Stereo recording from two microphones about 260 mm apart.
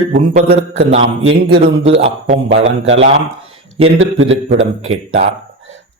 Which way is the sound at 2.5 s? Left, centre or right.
Right.